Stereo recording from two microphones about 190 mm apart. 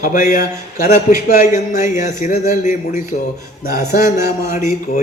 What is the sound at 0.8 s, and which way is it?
A man's voice, 40° left (ahead or behind).